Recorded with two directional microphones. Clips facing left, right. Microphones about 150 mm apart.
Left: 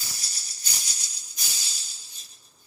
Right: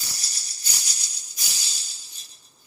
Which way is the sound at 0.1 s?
75° right (ahead or behind).